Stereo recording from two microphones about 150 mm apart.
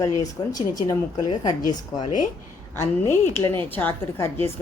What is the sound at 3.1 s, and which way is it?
Speech, 15° left (ahead or behind).